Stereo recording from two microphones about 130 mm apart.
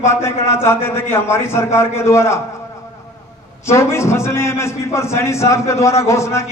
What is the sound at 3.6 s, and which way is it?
A man's voice, 20° left (ahead or behind).